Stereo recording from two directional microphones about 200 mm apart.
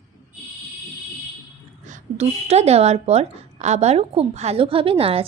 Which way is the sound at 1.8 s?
35° right (ahead or behind).